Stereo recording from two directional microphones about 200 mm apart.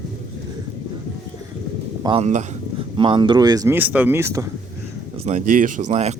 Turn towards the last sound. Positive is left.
turn(degrees=-35)  # may be behind; listen again after turning